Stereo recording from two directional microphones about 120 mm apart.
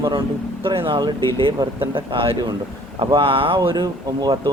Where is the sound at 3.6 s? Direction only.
35° right (ahead or behind).